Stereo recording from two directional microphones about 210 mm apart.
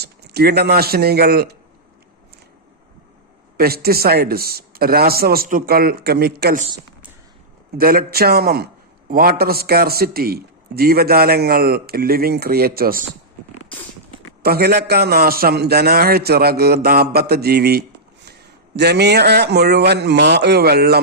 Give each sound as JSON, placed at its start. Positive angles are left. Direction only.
{"t": 0.0, "sound": "speech", "side_deg": -50}
{"t": 3.6, "sound": "a man's voice", "side_deg": -45}
{"t": 7.8, "sound": "a man's voice", "side_deg": -45}
{"t": 14.4, "sound": "a man's voice", "side_deg": -50}